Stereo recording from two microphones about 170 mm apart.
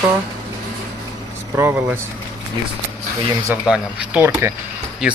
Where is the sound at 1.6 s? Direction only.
15° right (ahead or behind).